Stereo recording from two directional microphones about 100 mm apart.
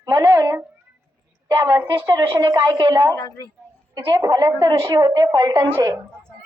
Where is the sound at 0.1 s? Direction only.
20° right (ahead or behind).